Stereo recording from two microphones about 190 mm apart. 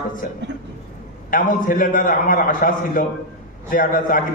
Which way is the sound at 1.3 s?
45° left (ahead or behind).